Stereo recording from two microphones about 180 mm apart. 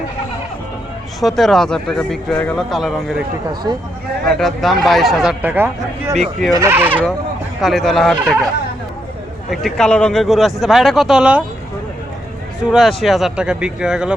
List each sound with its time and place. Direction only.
1.2 s speech: centre (ahead or behind)
3.5 s speech: 25° right (ahead or behind)
4.3 s speech: centre (ahead or behind)
7.6 s speech: centre (ahead or behind)
9.5 s speech: centre (ahead or behind)
12.6 s speech: centre (ahead or behind)